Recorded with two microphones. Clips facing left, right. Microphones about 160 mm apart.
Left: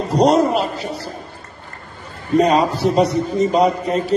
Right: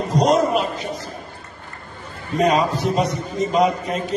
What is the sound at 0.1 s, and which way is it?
Speech, 35° left (ahead or behind).